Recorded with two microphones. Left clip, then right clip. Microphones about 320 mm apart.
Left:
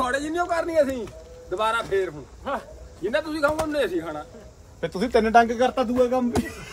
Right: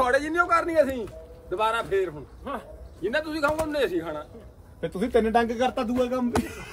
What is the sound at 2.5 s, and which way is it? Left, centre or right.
Speech, left.